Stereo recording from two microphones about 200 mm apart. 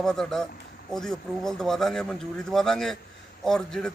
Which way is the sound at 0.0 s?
Centre (ahead or behind).